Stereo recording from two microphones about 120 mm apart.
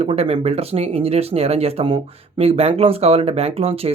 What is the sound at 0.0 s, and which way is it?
Speech, 55° right (ahead or behind).